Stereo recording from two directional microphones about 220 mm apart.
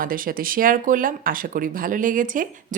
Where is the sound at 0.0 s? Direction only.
40° right (ahead or behind).